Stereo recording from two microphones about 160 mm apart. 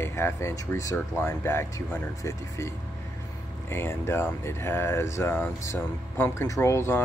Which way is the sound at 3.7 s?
15° left (ahead or behind).